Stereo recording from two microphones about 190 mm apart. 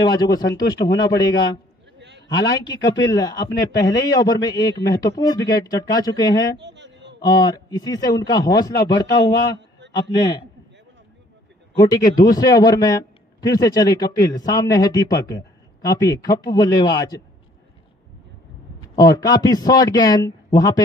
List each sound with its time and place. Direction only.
0.0 s a man's voice: 20° left (ahead or behind)
2.0 s a sound: 65° right (ahead or behind)
2.4 s a man's voice: 20° left (ahead or behind)
6.6 s a sound: 65° right (ahead or behind)
7.2 s a man's voice: 20° left (ahead or behind)
11.7 s a man's voice: 20° left (ahead or behind)
18.9 s a man's voice: 20° left (ahead or behind)